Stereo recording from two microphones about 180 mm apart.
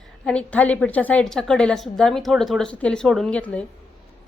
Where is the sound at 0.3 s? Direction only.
5° left (ahead or behind).